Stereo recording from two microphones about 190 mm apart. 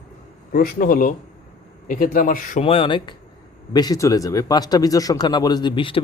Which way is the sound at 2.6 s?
30° left (ahead or behind).